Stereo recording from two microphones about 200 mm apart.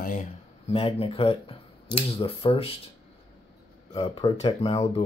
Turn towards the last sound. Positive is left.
turn(degrees=30)  # may be behind; listen again after turning